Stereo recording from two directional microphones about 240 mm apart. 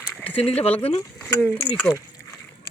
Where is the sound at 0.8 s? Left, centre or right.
Left.